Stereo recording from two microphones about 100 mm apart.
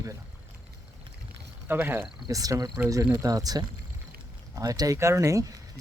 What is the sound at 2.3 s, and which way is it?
Speech, 35° right (ahead or behind).